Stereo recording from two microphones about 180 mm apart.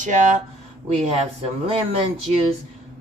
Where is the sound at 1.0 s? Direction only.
35° right (ahead or behind).